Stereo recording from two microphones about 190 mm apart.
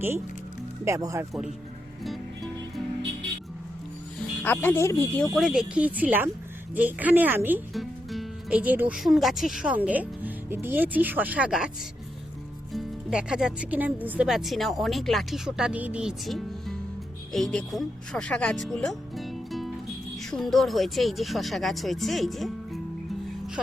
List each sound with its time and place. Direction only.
0.9 s speech: 15° right (ahead or behind)
4.4 s speech: 10° left (ahead or behind)
5.3 s speech: centre (ahead or behind)
12.7 s speech: 5° right (ahead or behind)